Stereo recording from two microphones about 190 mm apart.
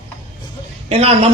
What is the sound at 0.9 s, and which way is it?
Speech, 30° right (ahead or behind).